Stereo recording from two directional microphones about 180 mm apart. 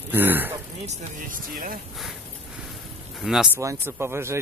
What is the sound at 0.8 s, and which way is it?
Speech, 45° right (ahead or behind).